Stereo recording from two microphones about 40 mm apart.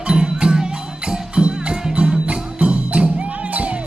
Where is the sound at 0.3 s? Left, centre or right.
Centre.